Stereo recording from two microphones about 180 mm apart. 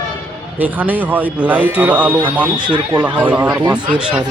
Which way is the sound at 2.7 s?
20° right (ahead or behind).